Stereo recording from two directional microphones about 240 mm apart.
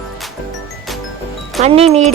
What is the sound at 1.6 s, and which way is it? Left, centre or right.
Speech, right.